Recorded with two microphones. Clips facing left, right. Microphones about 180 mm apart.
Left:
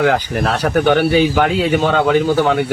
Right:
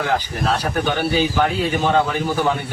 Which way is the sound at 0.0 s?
65° left (ahead or behind).